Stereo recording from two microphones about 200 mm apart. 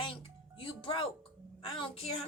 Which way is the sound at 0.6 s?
25° left (ahead or behind).